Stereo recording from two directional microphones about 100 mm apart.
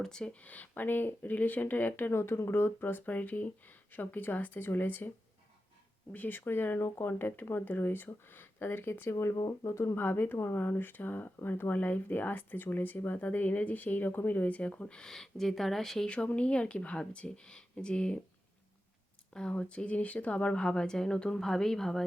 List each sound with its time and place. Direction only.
0.0 s speech: 10° left (ahead or behind)
6.1 s speech: 20° left (ahead or behind)
19.3 s speech: 10° left (ahead or behind)